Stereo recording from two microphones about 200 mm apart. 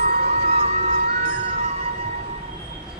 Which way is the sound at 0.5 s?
30° right (ahead or behind).